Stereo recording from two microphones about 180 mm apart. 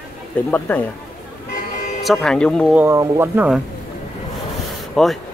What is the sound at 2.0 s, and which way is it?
Speech, centre (ahead or behind).